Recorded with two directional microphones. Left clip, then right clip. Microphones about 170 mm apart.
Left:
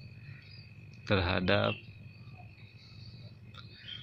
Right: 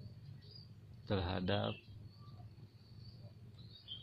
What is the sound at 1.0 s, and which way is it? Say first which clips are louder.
Speech: left 10 dB; 5° left (ahead or behind).